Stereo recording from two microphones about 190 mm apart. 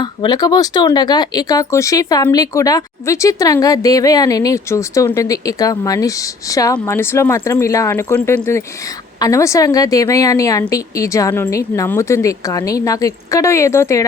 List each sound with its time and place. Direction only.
0.0 s a woman's voice: 20° left (ahead or behind)